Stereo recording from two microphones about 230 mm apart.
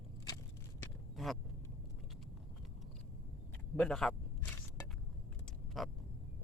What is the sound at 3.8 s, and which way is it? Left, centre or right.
Speech, centre.